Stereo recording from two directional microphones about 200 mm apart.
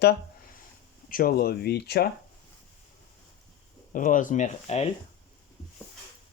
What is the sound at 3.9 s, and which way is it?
Speech, 40° left (ahead or behind).